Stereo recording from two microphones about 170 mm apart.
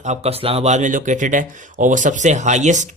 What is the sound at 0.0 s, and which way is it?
Speech, 40° right (ahead or behind).